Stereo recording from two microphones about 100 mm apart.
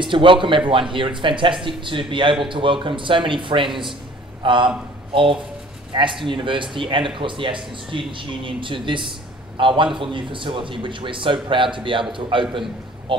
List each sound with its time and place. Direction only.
0.0 s speech: 55° right (ahead or behind)